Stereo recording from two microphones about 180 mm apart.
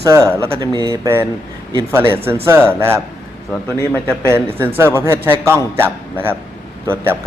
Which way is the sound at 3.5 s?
5° left (ahead or behind).